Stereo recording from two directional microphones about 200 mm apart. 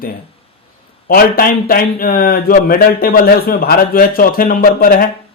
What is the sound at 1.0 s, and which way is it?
Speech, 45° left (ahead or behind).